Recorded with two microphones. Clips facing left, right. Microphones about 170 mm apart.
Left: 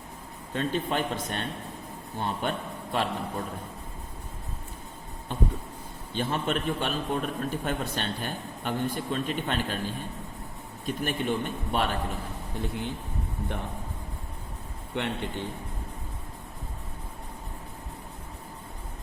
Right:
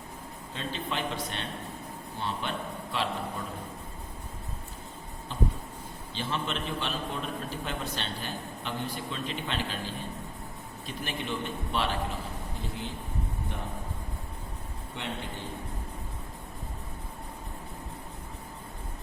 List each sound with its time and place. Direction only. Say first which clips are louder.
0.5 s a man's voice: left 6 dB; 50° left (ahead or behind)
5.3 s a man's voice: left 2 dB; 55° left (ahead or behind)
15.0 s a man's voice: left 7 dB; 65° left (ahead or behind)